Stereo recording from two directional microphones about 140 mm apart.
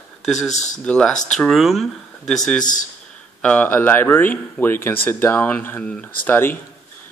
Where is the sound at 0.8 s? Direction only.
5° left (ahead or behind).